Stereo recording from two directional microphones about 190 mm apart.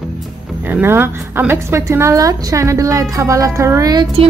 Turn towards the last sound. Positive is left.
turn(degrees=-20)  # may be behind; listen again after turning